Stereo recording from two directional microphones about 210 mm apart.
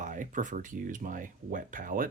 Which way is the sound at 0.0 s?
40° right (ahead or behind).